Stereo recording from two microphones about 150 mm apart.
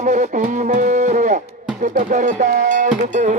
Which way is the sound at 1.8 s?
60° right (ahead or behind).